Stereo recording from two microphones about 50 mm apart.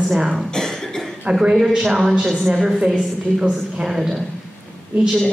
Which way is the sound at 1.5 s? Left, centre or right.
Centre.